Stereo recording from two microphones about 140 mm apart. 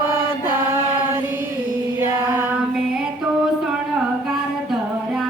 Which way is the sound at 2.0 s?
15° right (ahead or behind).